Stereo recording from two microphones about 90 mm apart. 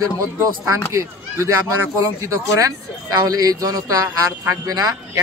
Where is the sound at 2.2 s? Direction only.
35° right (ahead or behind).